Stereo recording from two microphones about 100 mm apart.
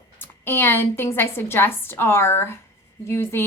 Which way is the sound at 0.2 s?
20° left (ahead or behind).